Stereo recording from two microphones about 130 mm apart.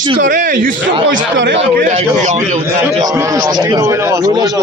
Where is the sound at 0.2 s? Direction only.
90° right.